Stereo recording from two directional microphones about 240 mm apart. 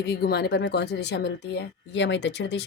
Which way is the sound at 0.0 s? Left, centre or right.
Left.